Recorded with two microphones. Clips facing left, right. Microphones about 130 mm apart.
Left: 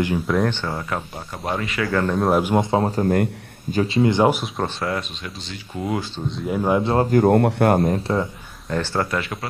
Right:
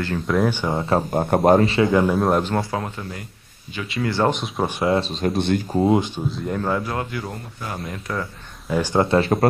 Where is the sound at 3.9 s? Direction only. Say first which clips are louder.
Left 3 dB; 20° left (ahead or behind).